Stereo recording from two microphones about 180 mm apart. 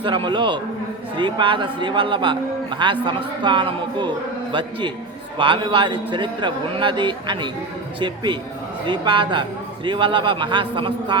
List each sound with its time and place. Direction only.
0.0 s a man's voice: 25° right (ahead or behind)
5.4 s a man's voice: 30° right (ahead or behind)